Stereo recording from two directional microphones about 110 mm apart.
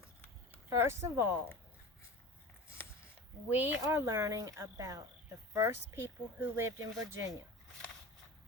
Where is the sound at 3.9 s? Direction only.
30° right (ahead or behind).